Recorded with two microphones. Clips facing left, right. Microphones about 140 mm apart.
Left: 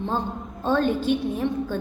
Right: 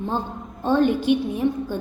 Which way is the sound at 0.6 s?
15° right (ahead or behind).